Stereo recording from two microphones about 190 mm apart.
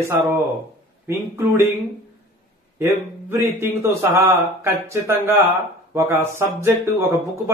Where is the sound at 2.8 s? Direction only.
10° right (ahead or behind).